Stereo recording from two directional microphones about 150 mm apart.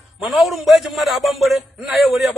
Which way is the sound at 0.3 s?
Centre (ahead or behind).